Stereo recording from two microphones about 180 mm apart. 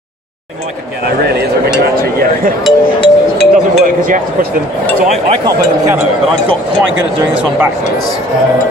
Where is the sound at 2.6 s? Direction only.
5° left (ahead or behind).